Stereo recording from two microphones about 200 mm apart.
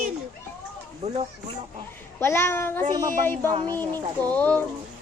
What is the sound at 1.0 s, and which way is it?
Speech, 35° right (ahead or behind).